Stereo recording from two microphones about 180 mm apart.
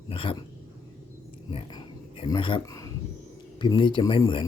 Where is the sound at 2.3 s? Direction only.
25° left (ahead or behind).